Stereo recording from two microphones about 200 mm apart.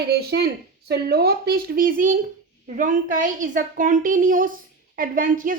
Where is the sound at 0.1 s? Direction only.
55° right (ahead or behind).